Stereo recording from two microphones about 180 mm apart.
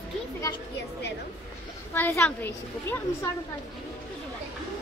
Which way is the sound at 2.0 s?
10° left (ahead or behind).